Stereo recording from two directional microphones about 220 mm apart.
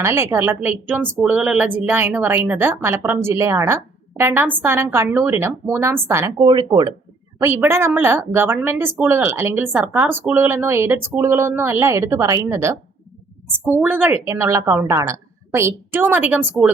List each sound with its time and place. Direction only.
0.0 s a woman's voice: 10° right (ahead or behind)
13.8 s a woman's voice: 10° right (ahead or behind)